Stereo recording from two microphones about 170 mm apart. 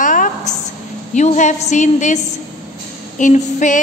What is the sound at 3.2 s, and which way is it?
Speech, 45° left (ahead or behind).